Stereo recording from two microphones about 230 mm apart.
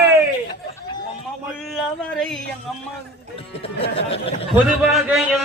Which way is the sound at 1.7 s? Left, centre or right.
Centre.